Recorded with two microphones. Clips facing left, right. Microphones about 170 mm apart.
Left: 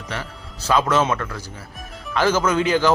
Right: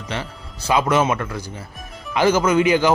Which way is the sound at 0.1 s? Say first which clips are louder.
Right 3 dB; 15° right (ahead or behind).